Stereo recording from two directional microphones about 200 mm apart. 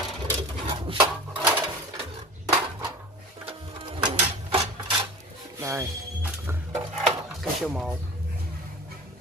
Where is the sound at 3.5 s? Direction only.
25° right (ahead or behind).